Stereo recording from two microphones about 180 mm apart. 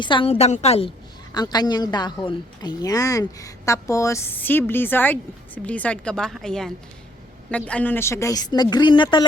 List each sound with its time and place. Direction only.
0.0 s a woman's voice: 30° left (ahead or behind)
1.3 s a woman's voice: 25° left (ahead or behind)